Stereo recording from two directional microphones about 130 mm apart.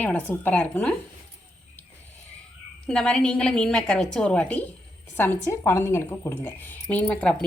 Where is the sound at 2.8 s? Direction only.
5° left (ahead or behind).